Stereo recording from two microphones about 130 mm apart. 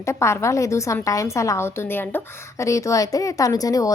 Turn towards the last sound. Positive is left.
turn(degrees=25)  # may be behind; listen again after turning